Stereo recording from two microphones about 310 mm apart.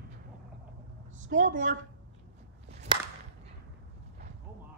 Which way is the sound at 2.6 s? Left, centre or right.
Centre.